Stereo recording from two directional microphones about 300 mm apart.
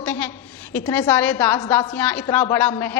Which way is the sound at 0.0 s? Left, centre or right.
Centre.